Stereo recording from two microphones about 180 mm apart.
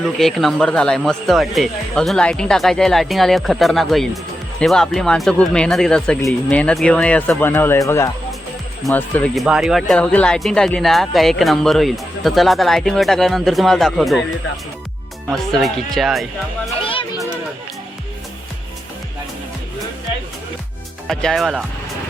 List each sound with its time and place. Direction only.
0.0 s speech: centre (ahead or behind)
15.3 s speech: centre (ahead or behind)
16.8 s children playing: 30° left (ahead or behind)
21.1 s speech: centre (ahead or behind)